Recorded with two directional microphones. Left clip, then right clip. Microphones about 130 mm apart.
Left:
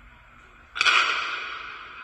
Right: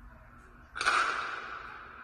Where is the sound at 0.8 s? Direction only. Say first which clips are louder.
Left 8 dB; 25° left (ahead or behind).